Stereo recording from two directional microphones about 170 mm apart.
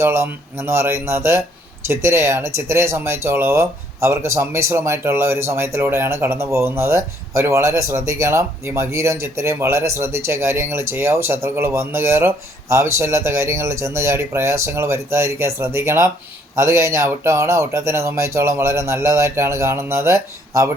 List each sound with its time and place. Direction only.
0.0 s speech: 15° right (ahead or behind)